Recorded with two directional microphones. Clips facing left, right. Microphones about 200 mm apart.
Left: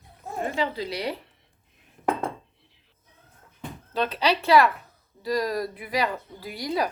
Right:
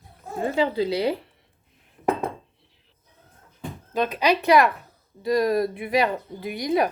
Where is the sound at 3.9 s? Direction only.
15° right (ahead or behind).